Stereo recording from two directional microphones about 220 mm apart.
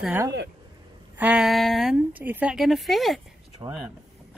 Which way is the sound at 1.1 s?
5° right (ahead or behind).